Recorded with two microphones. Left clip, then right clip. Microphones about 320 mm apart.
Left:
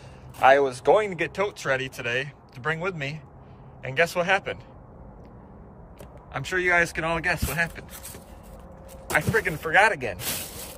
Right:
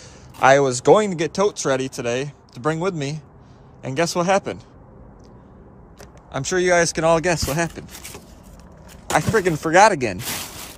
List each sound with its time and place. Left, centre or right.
0.4 s speech: right
6.3 s speech: centre
9.4 s speech: centre